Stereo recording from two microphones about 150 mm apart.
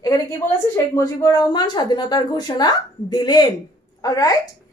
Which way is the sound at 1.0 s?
25° left (ahead or behind).